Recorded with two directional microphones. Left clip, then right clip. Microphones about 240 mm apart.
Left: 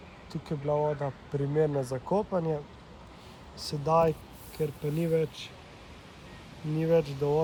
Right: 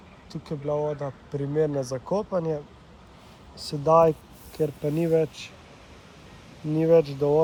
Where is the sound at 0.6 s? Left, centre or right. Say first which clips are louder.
Right 1 dB; centre.